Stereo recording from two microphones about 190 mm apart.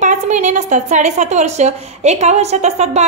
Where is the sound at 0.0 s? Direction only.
40° right (ahead or behind).